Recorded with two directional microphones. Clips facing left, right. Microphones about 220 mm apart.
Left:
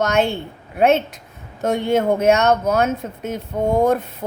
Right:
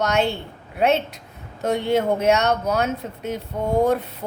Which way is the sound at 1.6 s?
50° left (ahead or behind).